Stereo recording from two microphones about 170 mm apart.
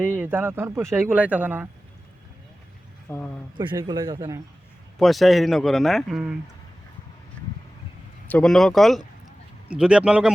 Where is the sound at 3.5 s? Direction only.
25° right (ahead or behind).